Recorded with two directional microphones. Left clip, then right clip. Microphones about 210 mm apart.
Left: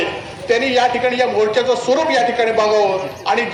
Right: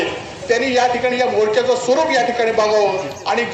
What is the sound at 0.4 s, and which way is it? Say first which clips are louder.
A man's voice: left 1 dB; 25° left (ahead or behind).